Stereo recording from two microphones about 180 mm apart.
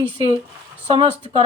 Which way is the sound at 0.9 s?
30° right (ahead or behind).